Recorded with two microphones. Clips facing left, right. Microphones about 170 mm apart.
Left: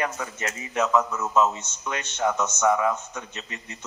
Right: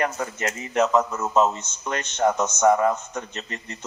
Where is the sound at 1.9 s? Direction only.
45° right (ahead or behind).